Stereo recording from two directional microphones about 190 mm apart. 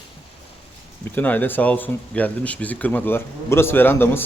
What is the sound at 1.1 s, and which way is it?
Speech, 10° left (ahead or behind).